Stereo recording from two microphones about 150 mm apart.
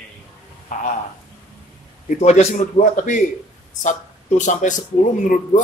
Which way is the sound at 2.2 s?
50° left (ahead or behind).